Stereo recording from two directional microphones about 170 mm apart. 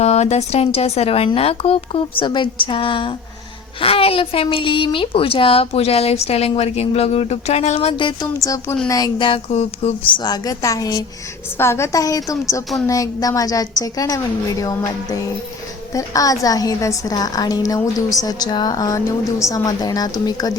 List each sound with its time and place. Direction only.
0.0 s a woman's voice: 40° left (ahead or behind)
7.9 s a woman's voice: 25° left (ahead or behind)
10.2 s a woman's voice: 25° left (ahead or behind)